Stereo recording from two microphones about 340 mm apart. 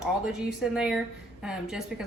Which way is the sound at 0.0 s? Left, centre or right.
Centre.